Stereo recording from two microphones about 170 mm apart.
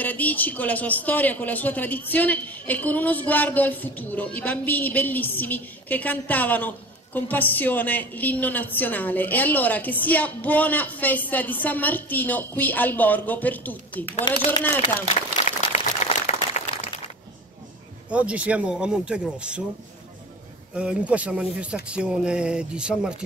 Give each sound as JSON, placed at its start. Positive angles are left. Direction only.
{"t": 0.0, "sound": "a woman's voice", "side_deg": 10}
{"t": 14.2, "sound": "a man's voice", "side_deg": 25}
{"t": 15.4, "sound": "a sound", "side_deg": 40}
{"t": 18.1, "sound": "speech", "side_deg": -5}
{"t": 20.7, "sound": "speech", "side_deg": -5}